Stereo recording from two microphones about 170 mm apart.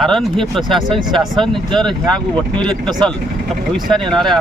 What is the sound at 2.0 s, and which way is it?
Speech, 25° right (ahead or behind).